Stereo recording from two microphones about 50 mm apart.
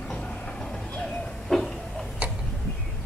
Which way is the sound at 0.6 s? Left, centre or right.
Centre.